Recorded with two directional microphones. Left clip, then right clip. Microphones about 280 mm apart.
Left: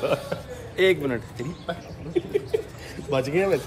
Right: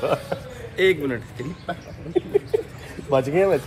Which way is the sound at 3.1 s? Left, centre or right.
Centre.